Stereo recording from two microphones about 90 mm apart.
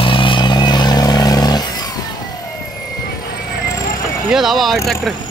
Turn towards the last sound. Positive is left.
turn(degrees=0)  # may be behind; listen again after turning